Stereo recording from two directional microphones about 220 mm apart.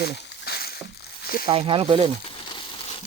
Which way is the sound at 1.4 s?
25° right (ahead or behind).